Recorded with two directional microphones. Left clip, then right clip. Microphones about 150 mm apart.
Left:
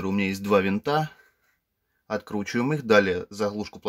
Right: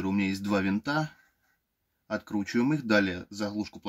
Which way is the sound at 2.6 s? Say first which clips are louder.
Left 6 dB; 40° left (ahead or behind).